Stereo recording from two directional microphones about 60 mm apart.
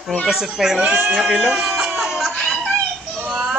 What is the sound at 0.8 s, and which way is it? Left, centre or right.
Speech, right.